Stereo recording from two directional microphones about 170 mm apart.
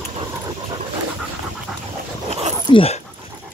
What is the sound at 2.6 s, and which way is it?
Speech, 30° left (ahead or behind).